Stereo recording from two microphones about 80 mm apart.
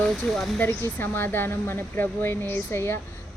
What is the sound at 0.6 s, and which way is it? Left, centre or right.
Speech, left.